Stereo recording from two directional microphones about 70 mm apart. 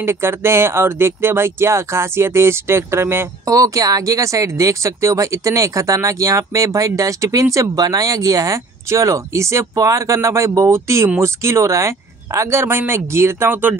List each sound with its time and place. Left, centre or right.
0.0 s speech: right
3.4 s speech: right